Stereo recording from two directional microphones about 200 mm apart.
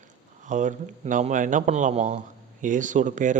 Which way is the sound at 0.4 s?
40° right (ahead or behind).